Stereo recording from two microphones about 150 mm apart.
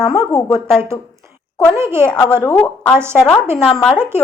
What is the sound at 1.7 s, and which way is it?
Speech, 15° right (ahead or behind).